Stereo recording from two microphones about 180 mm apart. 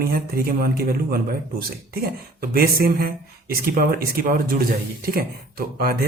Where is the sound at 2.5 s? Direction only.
55° right (ahead or behind).